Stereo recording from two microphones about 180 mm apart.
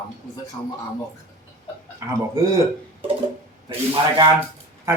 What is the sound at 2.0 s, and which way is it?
Speech, 15° right (ahead or behind).